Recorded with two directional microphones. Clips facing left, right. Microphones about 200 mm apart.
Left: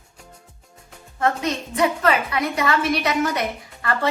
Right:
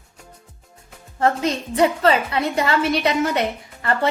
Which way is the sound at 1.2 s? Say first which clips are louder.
Right 2 dB; 30° right (ahead or behind).